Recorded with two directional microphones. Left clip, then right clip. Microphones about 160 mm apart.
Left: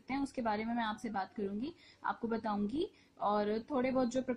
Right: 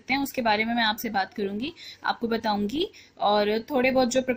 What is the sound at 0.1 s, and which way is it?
Speech, 25° right (ahead or behind).